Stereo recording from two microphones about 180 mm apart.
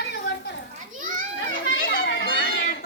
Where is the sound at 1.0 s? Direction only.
45° right (ahead or behind).